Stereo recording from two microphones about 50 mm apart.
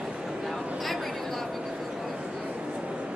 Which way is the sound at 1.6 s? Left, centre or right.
Centre.